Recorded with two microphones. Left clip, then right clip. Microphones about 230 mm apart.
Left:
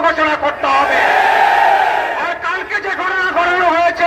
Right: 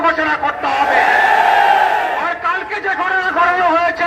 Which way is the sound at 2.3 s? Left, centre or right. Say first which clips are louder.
Even; left.